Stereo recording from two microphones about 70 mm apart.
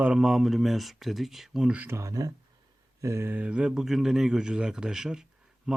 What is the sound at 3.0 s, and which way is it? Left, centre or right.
Speech, right.